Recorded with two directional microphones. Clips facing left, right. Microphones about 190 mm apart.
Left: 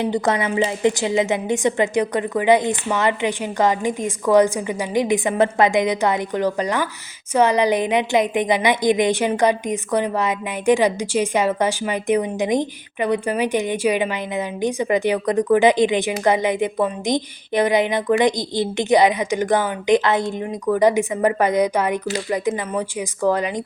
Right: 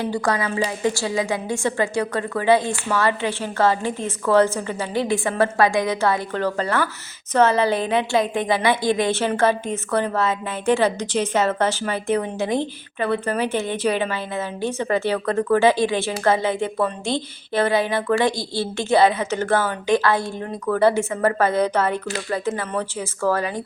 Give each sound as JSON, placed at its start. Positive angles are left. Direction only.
{"t": 0.0, "sound": "a woman's voice", "side_deg": 20}